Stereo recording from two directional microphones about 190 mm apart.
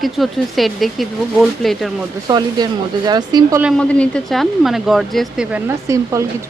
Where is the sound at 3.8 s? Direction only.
5° left (ahead or behind).